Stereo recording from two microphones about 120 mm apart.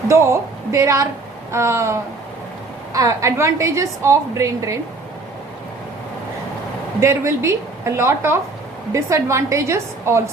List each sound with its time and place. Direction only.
0.1 s a woman's voice: 25° right (ahead or behind)
7.0 s a woman's voice: 25° right (ahead or behind)